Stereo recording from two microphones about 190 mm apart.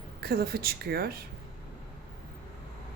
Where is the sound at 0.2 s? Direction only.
55° right (ahead or behind).